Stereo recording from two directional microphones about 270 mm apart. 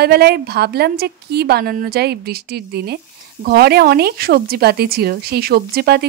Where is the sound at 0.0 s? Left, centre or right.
Right.